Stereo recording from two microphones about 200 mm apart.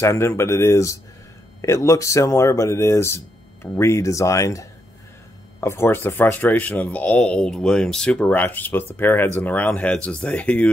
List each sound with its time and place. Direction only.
0.0 s speech: 15° left (ahead or behind)